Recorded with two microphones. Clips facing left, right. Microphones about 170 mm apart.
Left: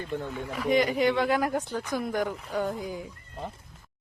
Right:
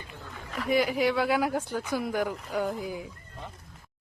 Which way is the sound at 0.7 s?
5° right (ahead or behind).